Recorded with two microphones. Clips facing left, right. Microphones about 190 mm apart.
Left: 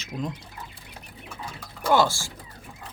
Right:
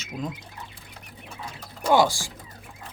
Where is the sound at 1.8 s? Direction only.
15° right (ahead or behind).